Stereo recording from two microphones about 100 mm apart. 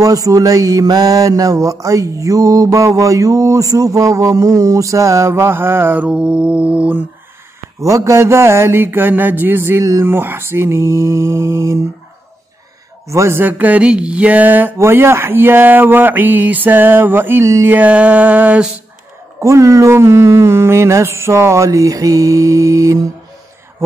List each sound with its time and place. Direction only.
0.0 s mantra: 35° right (ahead or behind)
6.0 s mantra: 10° right (ahead or behind)
7.8 s speech: 30° right (ahead or behind)
13.1 s speech: 25° right (ahead or behind)
17.6 s mantra: 15° right (ahead or behind)
19.4 s mantra: 30° right (ahead or behind)